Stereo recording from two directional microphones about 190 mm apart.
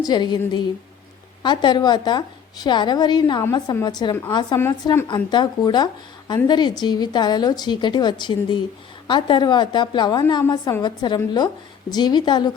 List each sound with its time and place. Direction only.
0.0 s a woman's voice: 20° left (ahead or behind)
4.6 s a woman's voice: 10° left (ahead or behind)
5.0 s a woman's voice: 25° left (ahead or behind)